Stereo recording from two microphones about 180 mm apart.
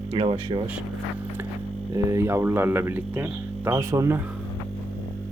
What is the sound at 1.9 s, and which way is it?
Speech, 15° right (ahead or behind).